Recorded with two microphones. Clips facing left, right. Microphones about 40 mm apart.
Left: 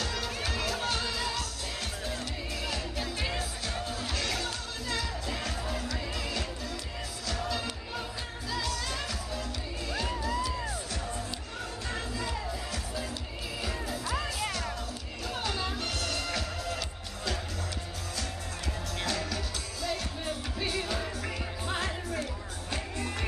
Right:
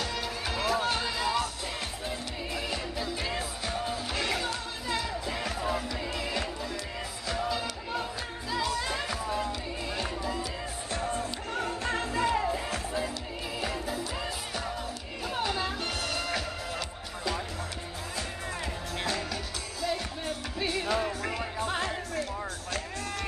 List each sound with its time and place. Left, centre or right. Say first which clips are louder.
0.0 s music: right 1 dB; centre
3.0 s music: right 1 dB; centre
3.3 s music: right 2 dB; centre
10.9 s music: right 4 dB; right
13.6 s music: right 2 dB; centre
15.2 s music: right 3 dB; centre
18.9 s music: right 1 dB; centre